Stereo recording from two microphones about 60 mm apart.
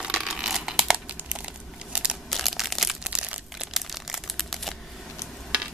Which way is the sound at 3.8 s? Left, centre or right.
Centre.